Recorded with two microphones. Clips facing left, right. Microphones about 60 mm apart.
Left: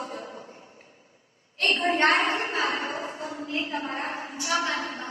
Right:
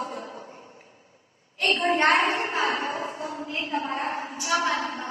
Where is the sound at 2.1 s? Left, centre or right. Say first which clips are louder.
Right 2 dB; right.